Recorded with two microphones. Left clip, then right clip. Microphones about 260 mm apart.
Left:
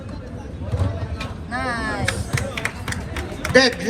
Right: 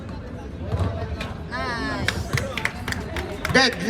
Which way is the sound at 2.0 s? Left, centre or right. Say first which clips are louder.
Left 1 dB; right.